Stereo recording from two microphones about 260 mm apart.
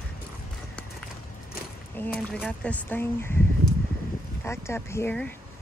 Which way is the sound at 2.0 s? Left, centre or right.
Centre.